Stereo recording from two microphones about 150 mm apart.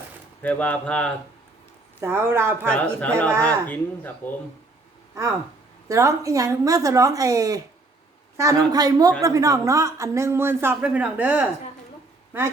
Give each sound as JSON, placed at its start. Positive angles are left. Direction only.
{"t": 0.4, "sound": "speech", "side_deg": 10}
{"t": 2.0, "sound": "speech", "side_deg": -15}
{"t": 2.6, "sound": "speech", "side_deg": 10}
{"t": 5.9, "sound": "a woman's voice", "side_deg": -20}